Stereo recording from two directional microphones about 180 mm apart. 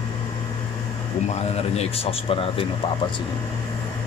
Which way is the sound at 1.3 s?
35° left (ahead or behind).